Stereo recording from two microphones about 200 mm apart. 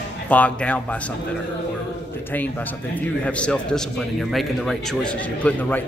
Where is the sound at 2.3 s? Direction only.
10° left (ahead or behind).